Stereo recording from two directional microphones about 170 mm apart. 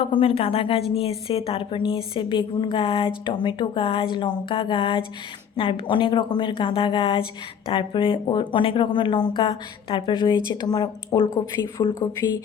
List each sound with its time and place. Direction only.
0.0 s a woman's voice: 30° left (ahead or behind)